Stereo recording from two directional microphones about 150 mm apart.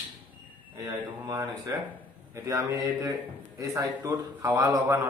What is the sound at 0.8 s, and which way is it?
A man's voice, 20° right (ahead or behind).